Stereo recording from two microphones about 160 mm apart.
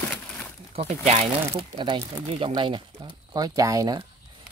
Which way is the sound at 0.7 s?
45° right (ahead or behind).